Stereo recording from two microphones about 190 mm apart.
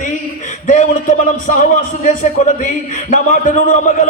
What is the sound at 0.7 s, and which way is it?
A man's voice, 40° left (ahead or behind).